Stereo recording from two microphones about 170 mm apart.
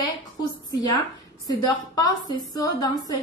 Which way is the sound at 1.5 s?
20° left (ahead or behind).